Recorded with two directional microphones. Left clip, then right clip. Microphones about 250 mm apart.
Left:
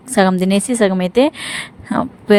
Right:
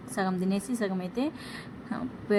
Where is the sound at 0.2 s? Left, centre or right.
Left.